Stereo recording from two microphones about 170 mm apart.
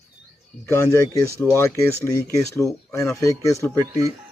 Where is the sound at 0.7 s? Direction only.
15° left (ahead or behind).